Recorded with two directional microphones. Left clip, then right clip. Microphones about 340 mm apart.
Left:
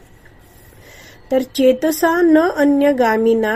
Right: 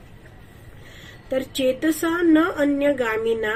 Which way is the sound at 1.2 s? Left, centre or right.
Left.